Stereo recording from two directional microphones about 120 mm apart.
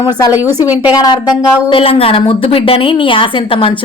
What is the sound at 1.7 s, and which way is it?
A woman's voice, 50° left (ahead or behind).